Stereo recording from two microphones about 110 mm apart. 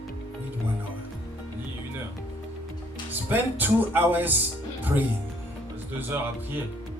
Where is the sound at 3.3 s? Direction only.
15° right (ahead or behind).